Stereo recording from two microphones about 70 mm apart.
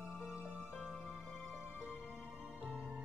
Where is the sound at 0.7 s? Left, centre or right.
Centre.